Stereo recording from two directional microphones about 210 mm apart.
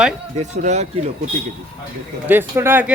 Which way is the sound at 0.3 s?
35° right (ahead or behind).